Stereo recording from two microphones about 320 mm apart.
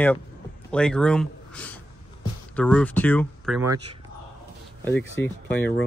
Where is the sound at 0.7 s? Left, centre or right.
Centre.